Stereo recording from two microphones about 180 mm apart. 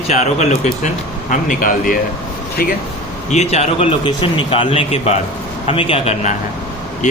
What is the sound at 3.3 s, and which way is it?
Speech, 40° left (ahead or behind).